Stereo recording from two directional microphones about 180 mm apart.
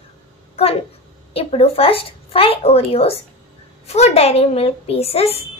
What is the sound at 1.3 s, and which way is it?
Speech, 35° left (ahead or behind).